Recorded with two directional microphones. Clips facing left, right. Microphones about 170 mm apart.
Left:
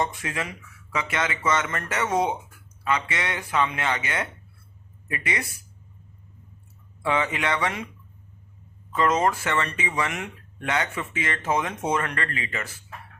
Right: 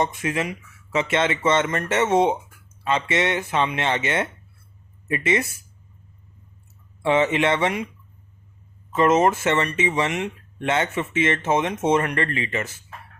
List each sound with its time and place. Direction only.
0.0 s speech: 20° right (ahead or behind)
7.0 s speech: 25° right (ahead or behind)
8.9 s speech: 25° right (ahead or behind)